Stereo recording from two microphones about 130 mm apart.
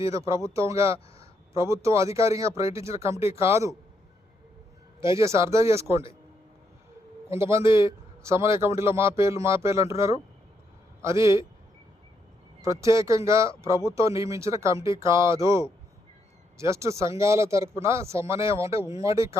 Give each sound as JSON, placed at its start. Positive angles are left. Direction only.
{"t": 0.0, "sound": "speech", "side_deg": -25}
{"t": 4.9, "sound": "speech", "side_deg": -20}
{"t": 7.3, "sound": "speech", "side_deg": -20}
{"t": 7.6, "sound": "a man's voice", "side_deg": 40}
{"t": 7.9, "sound": "speech", "side_deg": -20}
{"t": 12.6, "sound": "speech", "side_deg": -25}